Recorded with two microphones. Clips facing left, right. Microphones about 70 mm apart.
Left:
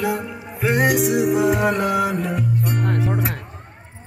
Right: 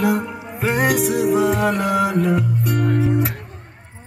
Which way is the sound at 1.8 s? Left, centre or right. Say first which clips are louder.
Right 2 dB; centre.